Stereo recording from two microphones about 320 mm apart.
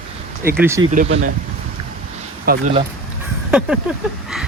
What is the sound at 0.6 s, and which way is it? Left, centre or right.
Speech, centre.